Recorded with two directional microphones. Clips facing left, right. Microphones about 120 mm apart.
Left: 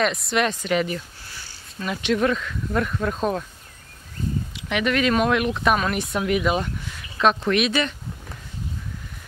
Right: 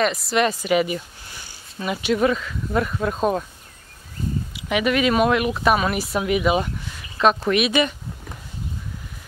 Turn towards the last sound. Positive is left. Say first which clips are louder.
# right 2 dB
turn(degrees=-10)  # may be behind; listen again after turning